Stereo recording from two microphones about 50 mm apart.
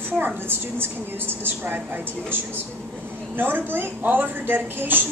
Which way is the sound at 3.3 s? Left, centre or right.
Right.